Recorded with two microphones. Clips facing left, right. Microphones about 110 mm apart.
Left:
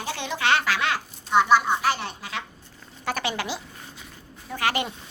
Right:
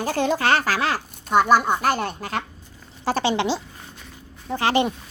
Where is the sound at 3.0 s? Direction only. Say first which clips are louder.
Right 7 dB; 30° right (ahead or behind).